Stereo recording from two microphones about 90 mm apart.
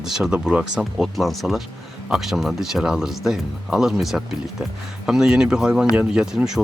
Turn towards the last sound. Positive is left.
turn(degrees=-5)  # may be behind; listen again after turning